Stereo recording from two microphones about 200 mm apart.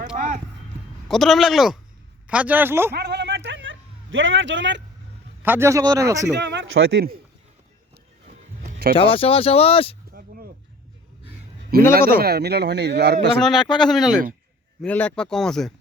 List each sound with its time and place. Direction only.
0.2 s music: 40° right (ahead or behind)
1.0 s speech: centre (ahead or behind)
2.9 s a sound: 55° right (ahead or behind)
5.4 s speech: 10° right (ahead or behind)
6.3 s speech: 60° right (ahead or behind)
9.0 s speech: 25° left (ahead or behind)
10.1 s a sound: 45° right (ahead or behind)
11.7 s a man's voice: 50° right (ahead or behind)
13.4 s speech: centre (ahead or behind)